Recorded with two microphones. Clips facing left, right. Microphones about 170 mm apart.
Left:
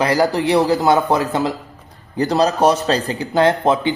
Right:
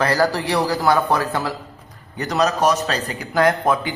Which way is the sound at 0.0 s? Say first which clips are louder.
Left 3 dB; 15° left (ahead or behind).